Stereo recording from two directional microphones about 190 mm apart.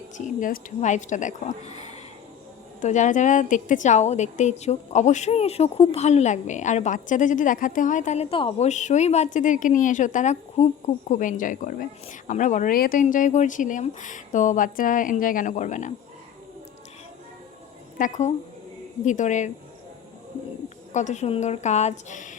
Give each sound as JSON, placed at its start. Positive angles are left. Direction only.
{"t": 0.2, "sound": "a woman's voice", "side_deg": 40}
{"t": 17.9, "sound": "a woman's voice", "side_deg": 40}
{"t": 20.9, "sound": "a woman's voice", "side_deg": 40}